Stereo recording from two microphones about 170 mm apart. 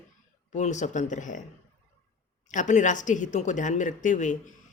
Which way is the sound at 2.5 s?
45° left (ahead or behind).